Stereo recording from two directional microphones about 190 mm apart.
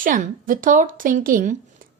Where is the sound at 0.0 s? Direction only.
45° right (ahead or behind).